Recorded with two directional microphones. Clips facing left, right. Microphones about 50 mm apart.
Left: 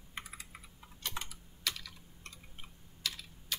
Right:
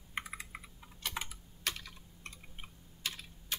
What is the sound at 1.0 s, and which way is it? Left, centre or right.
Typing, centre.